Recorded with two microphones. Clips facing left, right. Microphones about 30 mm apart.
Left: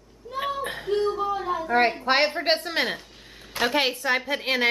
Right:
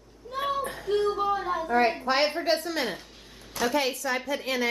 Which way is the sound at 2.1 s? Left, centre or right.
Left.